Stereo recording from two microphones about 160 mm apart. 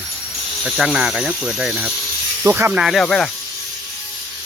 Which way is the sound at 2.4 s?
15° right (ahead or behind).